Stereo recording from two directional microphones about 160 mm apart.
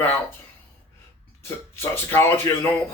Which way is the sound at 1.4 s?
15° left (ahead or behind).